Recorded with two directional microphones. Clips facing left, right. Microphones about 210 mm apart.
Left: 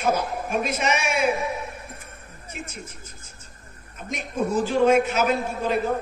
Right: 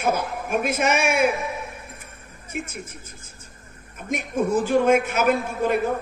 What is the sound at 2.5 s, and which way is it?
Speech, 55° right (ahead or behind).